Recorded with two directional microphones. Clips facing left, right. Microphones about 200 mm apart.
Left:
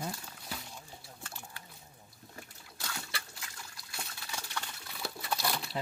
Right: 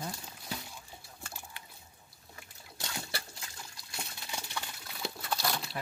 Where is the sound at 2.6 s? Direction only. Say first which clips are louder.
Right 3 dB; 25° right (ahead or behind).